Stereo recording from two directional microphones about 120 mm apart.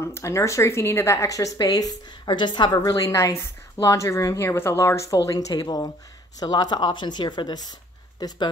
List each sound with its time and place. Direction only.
0.0 s a woman's voice: 25° left (ahead or behind)